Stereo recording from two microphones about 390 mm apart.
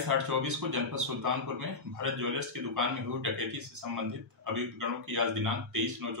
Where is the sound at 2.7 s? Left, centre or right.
Right.